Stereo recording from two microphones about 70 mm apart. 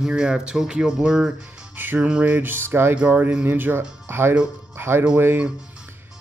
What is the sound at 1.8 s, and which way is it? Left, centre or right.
Music, right.